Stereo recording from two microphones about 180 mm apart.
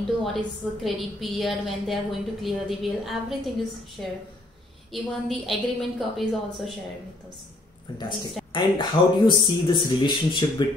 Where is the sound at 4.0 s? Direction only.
Centre (ahead or behind).